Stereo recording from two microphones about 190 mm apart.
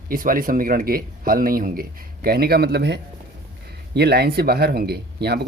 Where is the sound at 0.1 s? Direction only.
45° right (ahead or behind).